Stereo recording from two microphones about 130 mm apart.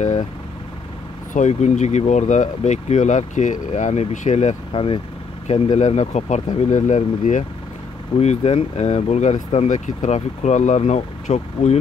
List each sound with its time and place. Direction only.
0.0 s vehicle: 65° left (ahead or behind)
1.3 s speech: 70° left (ahead or behind)
8.2 s speech: 60° left (ahead or behind)